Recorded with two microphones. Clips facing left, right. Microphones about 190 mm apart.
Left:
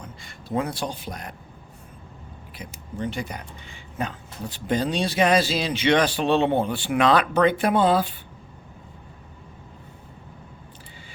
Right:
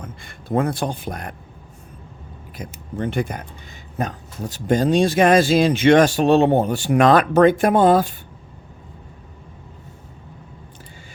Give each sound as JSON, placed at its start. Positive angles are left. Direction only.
{"t": 0.0, "sound": "a man's voice", "side_deg": -55}
{"t": 2.6, "sound": "speech", "side_deg": -45}